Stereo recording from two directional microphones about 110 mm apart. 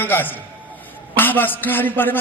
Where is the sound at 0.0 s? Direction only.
20° left (ahead or behind).